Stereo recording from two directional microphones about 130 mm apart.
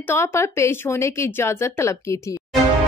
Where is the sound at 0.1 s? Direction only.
20° left (ahead or behind).